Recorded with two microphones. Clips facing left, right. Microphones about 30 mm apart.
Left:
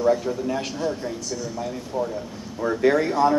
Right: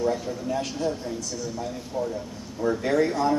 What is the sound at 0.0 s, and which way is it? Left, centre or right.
Speech, centre.